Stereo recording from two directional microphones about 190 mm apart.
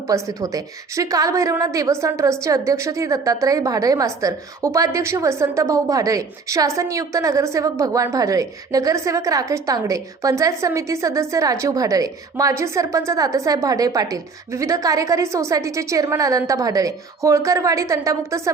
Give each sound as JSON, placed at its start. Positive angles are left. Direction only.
{"t": 0.1, "sound": "a woman's voice", "side_deg": -15}